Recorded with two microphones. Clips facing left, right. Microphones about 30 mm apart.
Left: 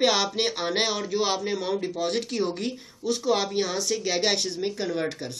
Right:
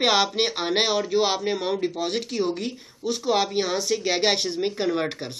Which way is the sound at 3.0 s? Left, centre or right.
Centre.